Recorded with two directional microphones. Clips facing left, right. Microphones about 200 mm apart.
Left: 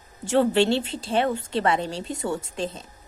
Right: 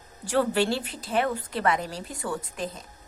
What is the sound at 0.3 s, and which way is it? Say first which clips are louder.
A woman's voice: left 4 dB; 25° left (ahead or behind).